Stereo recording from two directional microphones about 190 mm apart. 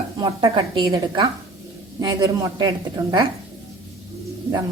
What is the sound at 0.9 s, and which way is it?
A woman's voice, 15° right (ahead or behind).